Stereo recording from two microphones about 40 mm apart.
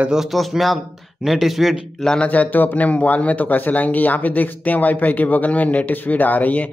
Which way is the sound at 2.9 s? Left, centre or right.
Left.